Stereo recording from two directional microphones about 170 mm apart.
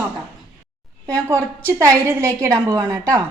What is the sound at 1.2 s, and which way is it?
A woman's voice, 15° right (ahead or behind).